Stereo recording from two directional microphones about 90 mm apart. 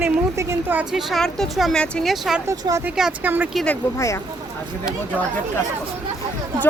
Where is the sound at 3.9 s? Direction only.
35° left (ahead or behind).